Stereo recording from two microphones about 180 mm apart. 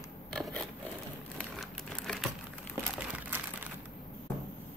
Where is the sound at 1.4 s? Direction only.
Centre (ahead or behind).